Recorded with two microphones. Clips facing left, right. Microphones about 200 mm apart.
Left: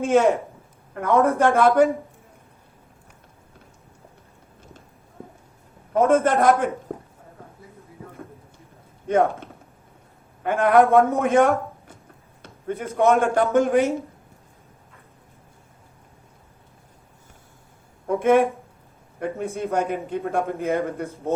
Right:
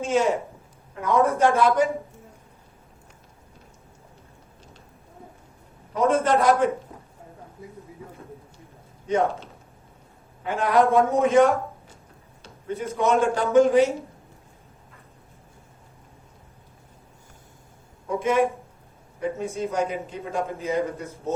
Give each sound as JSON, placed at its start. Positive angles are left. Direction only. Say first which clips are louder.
{"t": 0.0, "sound": "a man's voice", "louder": "left 4 dB", "side_deg": 55}
{"t": 5.9, "sound": "speech", "louder": "left 3 dB", "side_deg": 50}
{"t": 9.0, "sound": "a man's voice", "louder": "left 3 dB", "side_deg": 55}
{"t": 12.4, "sound": "a sound", "louder": "left 1 dB", "side_deg": 55}
{"t": 13.0, "sound": "speech", "louder": "left 4 dB", "side_deg": 55}
{"t": 18.2, "sound": "a man's voice", "louder": "left 5 dB", "side_deg": 55}
{"t": 19.7, "sound": "a man's voice", "louder": "left 3 dB", "side_deg": 55}